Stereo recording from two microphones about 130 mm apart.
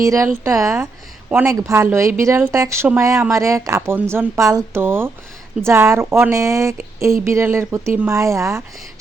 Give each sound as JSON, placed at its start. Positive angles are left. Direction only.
{"t": 0.0, "sound": "speech", "side_deg": -25}